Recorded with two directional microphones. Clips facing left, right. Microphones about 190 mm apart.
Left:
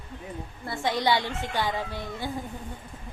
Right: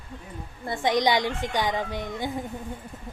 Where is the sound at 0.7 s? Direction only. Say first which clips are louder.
Right 3 dB; 15° right (ahead or behind).